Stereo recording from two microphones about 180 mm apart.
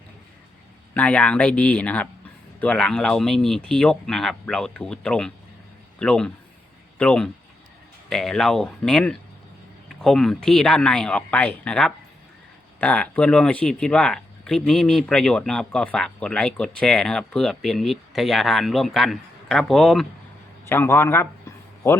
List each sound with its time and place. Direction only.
0.9 s speech: 5° left (ahead or behind)
20.7 s speech: 15° left (ahead or behind)